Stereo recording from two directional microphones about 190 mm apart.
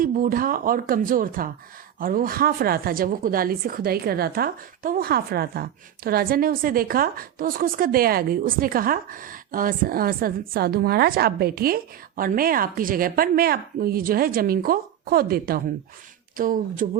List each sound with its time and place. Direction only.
0.0 s a woman's voice: 45° right (ahead or behind)